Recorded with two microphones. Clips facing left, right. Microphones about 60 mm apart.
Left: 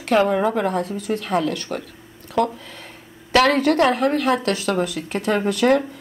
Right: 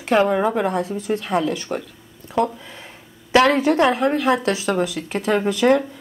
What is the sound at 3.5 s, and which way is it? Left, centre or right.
Speech, centre.